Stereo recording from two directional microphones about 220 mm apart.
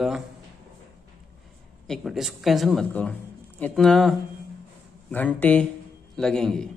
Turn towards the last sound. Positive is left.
turn(degrees=5)  # may be behind; listen again after turning